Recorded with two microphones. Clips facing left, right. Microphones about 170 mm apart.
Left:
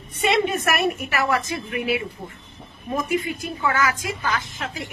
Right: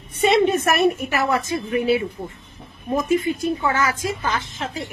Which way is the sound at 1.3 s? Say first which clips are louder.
Right 3 dB; 30° right (ahead or behind).